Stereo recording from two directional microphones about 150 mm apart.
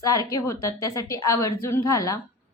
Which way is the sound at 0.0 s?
25° left (ahead or behind).